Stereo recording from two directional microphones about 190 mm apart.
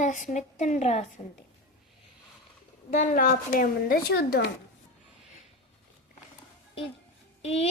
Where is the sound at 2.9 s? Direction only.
45° left (ahead or behind).